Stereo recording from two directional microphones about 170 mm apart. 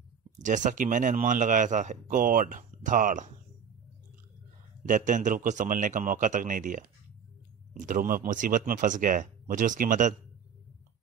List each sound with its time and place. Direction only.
0.4 s a man's voice: 50° right (ahead or behind)
4.8 s a man's voice: 50° right (ahead or behind)
7.8 s a man's voice: 55° right (ahead or behind)